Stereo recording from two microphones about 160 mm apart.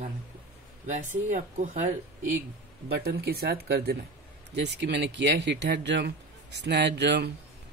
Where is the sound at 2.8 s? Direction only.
85° right.